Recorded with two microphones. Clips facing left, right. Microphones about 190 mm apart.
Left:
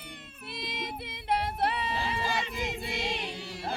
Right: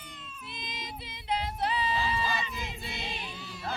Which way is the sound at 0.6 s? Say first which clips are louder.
Left 6 dB; 60° left (ahead or behind).